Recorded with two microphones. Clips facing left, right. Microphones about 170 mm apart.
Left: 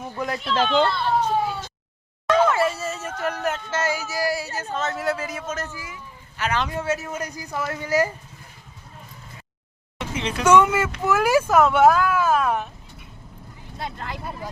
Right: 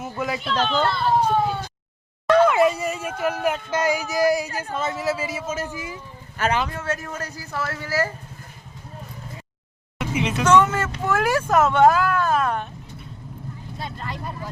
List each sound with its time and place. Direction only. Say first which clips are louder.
0.0 s a child's voice: right 1 dB; centre (ahead or behind)
2.5 s speech: right 3 dB; 15° right (ahead or behind)
5.7 s speech: right 5 dB; 25° right (ahead or behind)
6.4 s speech: right 4 dB; 50° right (ahead or behind)
6.7 s speech: left 2 dB; 10° left (ahead or behind)
10.0 s a sound: right 3 dB; 5° right (ahead or behind)
10.4 s speech: left 2 dB; 10° left (ahead or behind)
13.7 s speech: left 2 dB; centre (ahead or behind)